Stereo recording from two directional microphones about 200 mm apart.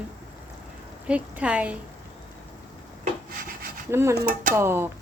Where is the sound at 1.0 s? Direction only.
5° right (ahead or behind).